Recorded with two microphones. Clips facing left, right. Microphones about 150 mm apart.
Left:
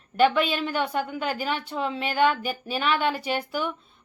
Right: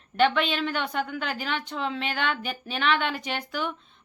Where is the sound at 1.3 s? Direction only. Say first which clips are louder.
Left 3 dB; 45° left (ahead or behind).